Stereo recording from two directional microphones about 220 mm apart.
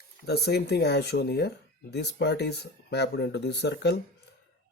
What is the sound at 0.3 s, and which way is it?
Speech, 45° left (ahead or behind).